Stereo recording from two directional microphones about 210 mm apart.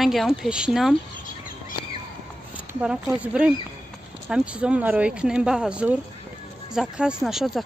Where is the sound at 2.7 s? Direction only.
5° right (ahead or behind).